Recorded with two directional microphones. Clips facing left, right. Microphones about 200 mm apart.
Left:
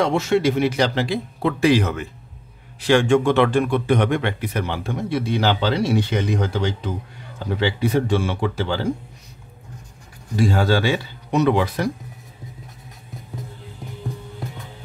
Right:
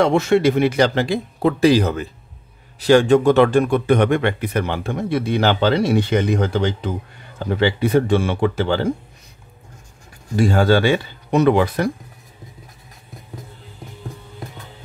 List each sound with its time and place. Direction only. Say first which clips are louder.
0.0 s speech: right 3 dB; 55° right (ahead or behind)
10.3 s speech: right 3 dB; 55° right (ahead or behind)